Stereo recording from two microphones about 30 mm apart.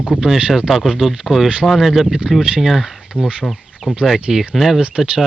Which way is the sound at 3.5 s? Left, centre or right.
Centre.